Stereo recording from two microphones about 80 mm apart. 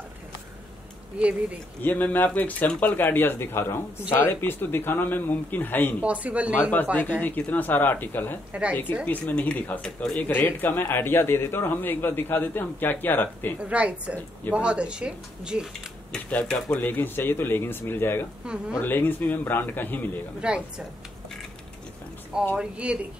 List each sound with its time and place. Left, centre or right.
1.8 s a man's voice: left
6.0 s speech: centre
6.7 s a man's voice: left
10.3 s a man's voice: left
13.6 s speech: centre
16.3 s a man's voice: centre
18.4 s speech: centre
18.8 s a man's voice: left
20.3 s speech: centre
22.6 s speech: centre